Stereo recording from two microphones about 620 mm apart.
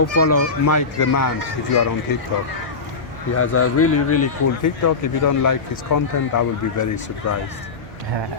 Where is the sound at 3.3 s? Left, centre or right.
Left.